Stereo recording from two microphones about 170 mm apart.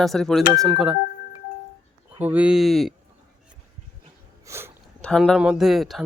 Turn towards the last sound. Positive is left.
turn(degrees=0)  # may be behind; listen again after turning